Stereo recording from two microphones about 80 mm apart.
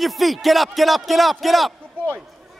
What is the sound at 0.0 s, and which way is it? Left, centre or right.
A man's voice, centre.